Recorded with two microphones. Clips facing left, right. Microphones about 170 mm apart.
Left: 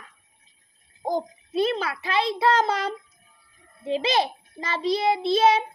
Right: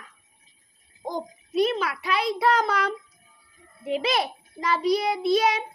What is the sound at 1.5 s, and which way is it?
A child's voice, 30° left (ahead or behind).